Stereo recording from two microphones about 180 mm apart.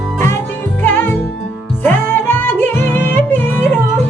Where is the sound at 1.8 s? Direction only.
10° left (ahead or behind).